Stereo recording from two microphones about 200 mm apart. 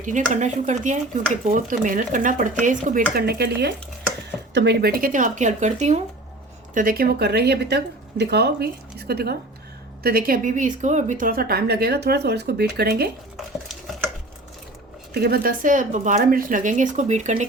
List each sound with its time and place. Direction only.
0.0 s a woman's voice: 40° right (ahead or behind)
6.7 s a woman's voice: 45° right (ahead or behind)
15.1 s a woman's voice: 50° right (ahead or behind); by 17.4 s 35° right (ahead or behind)